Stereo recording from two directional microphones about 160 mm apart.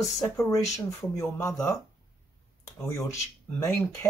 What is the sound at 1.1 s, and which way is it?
Speech, 20° left (ahead or behind).